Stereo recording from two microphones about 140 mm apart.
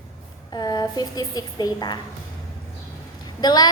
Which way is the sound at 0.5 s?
30° left (ahead or behind).